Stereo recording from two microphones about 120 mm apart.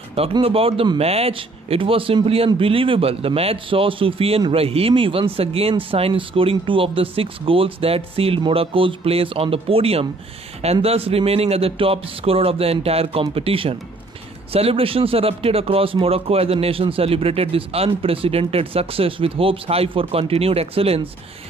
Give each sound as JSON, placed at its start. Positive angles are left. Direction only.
{"t": 0.4, "sound": "speech", "side_deg": -50}